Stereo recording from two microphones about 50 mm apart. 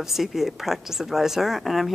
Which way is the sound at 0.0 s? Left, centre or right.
Centre.